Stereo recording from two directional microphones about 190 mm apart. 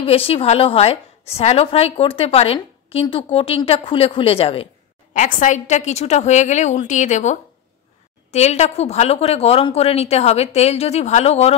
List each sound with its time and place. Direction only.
0.0 s a woman's voice: 30° left (ahead or behind)
5.1 s a woman's voice: 40° left (ahead or behind)